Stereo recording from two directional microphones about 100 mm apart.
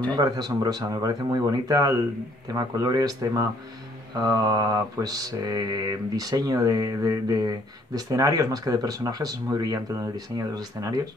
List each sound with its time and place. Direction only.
0.1 s mantra: 40° right (ahead or behind)